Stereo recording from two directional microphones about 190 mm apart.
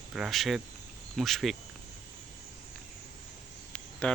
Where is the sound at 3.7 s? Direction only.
5° left (ahead or behind).